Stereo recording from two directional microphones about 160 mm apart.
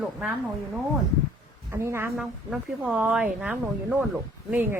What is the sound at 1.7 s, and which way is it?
Speech, 15° right (ahead or behind).